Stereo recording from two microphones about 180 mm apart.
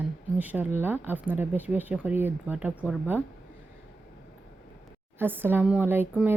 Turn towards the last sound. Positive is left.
turn(degrees=-10)  # may be behind; listen again after turning